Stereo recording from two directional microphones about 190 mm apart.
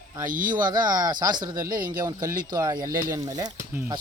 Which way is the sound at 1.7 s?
45° right (ahead or behind).